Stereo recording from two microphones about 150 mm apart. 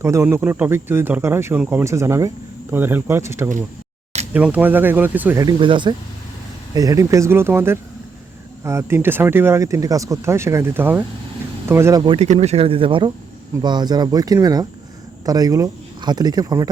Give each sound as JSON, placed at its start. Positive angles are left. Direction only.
{"t": 0.0, "sound": "speech", "side_deg": -15}
{"t": 5.4, "sound": "speech", "side_deg": -30}
{"t": 12.0, "sound": "speech", "side_deg": -45}